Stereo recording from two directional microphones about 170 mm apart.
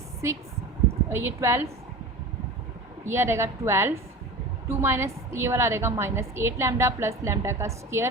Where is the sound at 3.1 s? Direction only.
15° right (ahead or behind).